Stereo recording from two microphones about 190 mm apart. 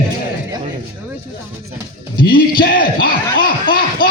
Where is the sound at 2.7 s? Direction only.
50° left (ahead or behind).